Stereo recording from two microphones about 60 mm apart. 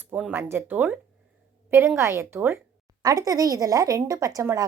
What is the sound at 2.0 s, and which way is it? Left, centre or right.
Speech, right.